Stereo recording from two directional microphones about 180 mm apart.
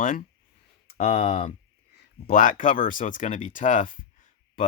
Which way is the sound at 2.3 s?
50° left (ahead or behind).